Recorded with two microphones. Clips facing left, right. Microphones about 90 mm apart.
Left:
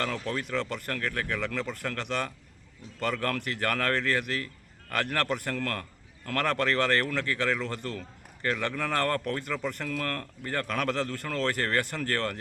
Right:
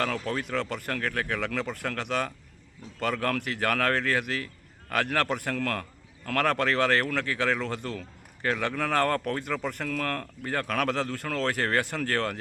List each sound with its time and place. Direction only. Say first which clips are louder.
0.3 s speech: right 1 dB; 15° right (ahead or behind)